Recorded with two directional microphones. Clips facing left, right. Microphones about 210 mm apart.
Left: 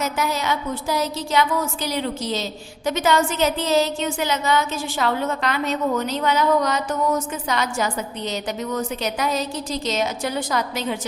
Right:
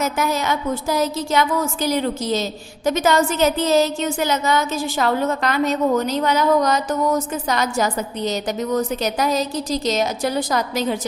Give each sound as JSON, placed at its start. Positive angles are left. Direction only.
{"t": 0.0, "sound": "a woman's voice", "side_deg": -50}